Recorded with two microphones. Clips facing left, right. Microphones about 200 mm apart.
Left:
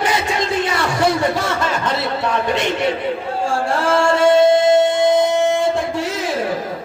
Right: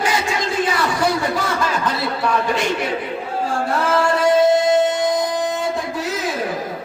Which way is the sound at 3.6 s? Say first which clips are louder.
Left 2 dB; 25° left (ahead or behind).